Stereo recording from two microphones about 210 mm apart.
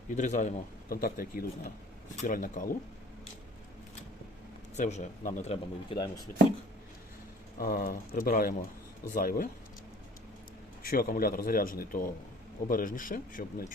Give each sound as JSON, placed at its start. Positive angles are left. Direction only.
{"t": 0.2, "sound": "a man's voice", "side_deg": 35}
{"t": 4.8, "sound": "speech", "side_deg": 35}
{"t": 7.6, "sound": "a man's voice", "side_deg": 45}
{"t": 10.8, "sound": "a man's voice", "side_deg": 45}